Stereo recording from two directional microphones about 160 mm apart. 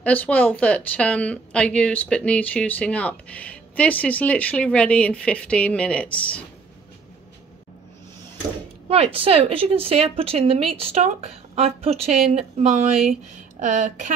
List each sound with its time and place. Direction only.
0.0 s a woman's voice: 10° left (ahead or behind)
8.8 s speech: 40° right (ahead or behind)